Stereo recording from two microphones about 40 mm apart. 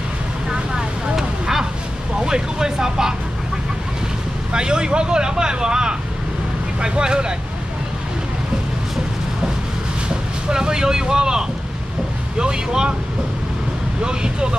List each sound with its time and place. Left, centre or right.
0.5 s vehicle: centre
2.1 s speech: centre
4.5 s speech: right
10.0 s speech: centre
14.0 s speech: right